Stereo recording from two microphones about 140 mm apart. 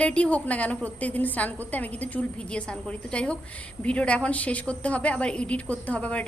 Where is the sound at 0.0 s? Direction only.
10° left (ahead or behind).